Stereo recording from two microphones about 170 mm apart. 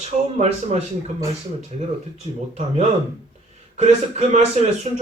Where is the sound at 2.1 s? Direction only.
40° right (ahead or behind).